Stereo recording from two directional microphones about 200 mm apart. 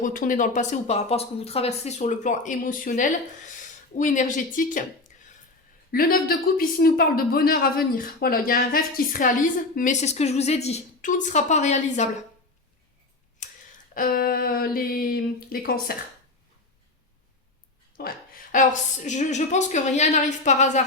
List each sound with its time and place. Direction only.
0.0 s speech: 40° left (ahead or behind)
5.9 s speech: 45° left (ahead or behind)
13.4 s a sound: 35° left (ahead or behind)
13.9 s speech: 45° left (ahead or behind)
18.0 s speech: 50° left (ahead or behind)
18.5 s speech: 40° left (ahead or behind)